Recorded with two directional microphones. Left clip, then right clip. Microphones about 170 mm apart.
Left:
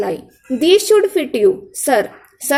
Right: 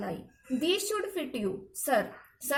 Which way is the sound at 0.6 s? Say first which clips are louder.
Left 19 dB; 25° left (ahead or behind).